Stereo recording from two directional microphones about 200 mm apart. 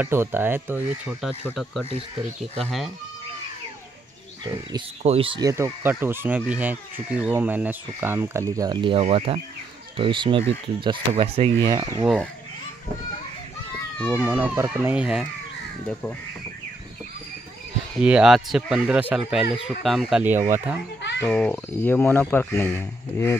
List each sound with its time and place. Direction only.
0.0 s speech: 10° right (ahead or behind)
5.0 s speech: 30° right (ahead or behind)
11.6 s speech: 20° right (ahead or behind)
14.1 s speech: 10° right (ahead or behind)
15.9 s speech: 10° left (ahead or behind)
18.0 s speech: 5° right (ahead or behind)
21.3 s speech: 5° left (ahead or behind)